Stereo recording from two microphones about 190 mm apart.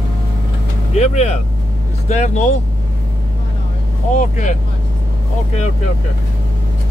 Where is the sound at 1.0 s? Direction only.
35° left (ahead or behind).